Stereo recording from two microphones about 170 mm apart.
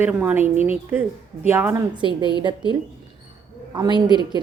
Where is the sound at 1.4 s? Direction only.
15° right (ahead or behind).